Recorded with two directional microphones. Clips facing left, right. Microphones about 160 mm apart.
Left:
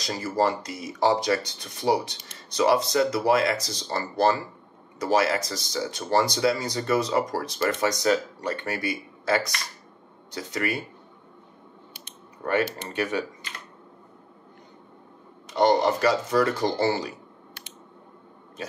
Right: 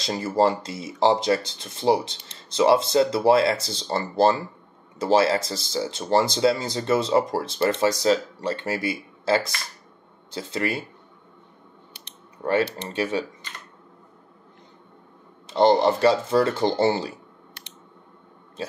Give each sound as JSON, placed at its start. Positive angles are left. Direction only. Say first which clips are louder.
{"t": 0.0, "sound": "speech", "louder": "right 3 dB", "side_deg": -25}
{"t": 12.4, "sound": "speech", "louder": "right 2 dB", "side_deg": -30}
{"t": 15.4, "sound": "speech", "louder": "right 3 dB", "side_deg": -25}